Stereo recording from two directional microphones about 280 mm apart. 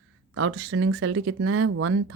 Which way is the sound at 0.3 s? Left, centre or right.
Right.